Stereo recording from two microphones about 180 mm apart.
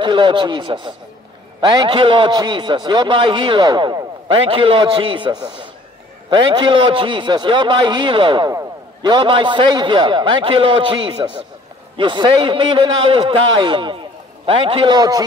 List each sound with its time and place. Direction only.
0.0 s a man's voice: 25° right (ahead or behind)